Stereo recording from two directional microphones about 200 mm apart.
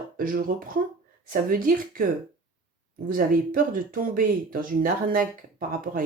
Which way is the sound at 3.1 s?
45° right (ahead or behind).